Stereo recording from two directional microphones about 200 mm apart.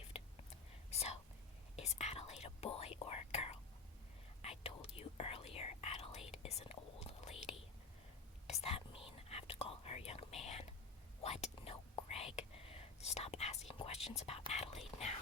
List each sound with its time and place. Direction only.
0.9 s whispering: 30° left (ahead or behind)